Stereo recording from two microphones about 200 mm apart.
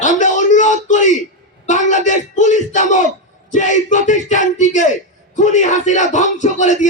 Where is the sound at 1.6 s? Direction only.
35° left (ahead or behind).